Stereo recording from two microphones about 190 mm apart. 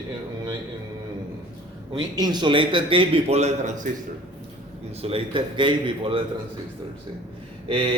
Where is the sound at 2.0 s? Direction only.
20° right (ahead or behind).